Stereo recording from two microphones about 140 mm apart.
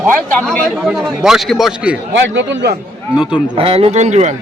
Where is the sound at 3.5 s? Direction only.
40° right (ahead or behind).